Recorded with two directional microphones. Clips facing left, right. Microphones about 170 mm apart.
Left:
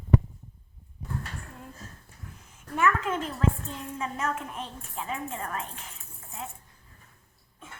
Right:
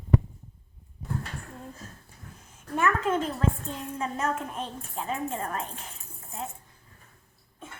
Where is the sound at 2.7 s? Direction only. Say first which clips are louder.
Right 1 dB; 30° right (ahead or behind).